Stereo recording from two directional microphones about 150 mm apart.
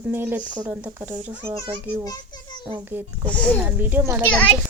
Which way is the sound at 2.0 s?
25° left (ahead or behind).